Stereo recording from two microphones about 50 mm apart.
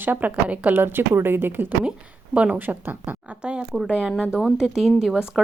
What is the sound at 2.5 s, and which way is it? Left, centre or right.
Speech, right.